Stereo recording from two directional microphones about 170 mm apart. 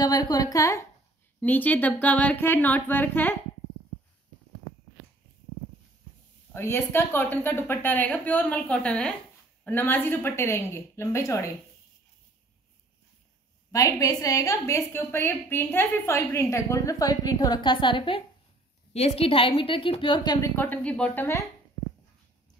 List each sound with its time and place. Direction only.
0.0 s a woman's voice: 20° left (ahead or behind)
6.5 s a woman's voice: 15° left (ahead or behind)
13.7 s a woman's voice: 20° left (ahead or behind)
20.4 s a woman's voice: 10° left (ahead or behind)